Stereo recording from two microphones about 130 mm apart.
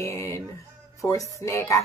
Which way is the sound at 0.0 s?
20° left (ahead or behind).